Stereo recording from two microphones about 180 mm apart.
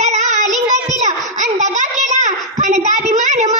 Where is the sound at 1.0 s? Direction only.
40° right (ahead or behind).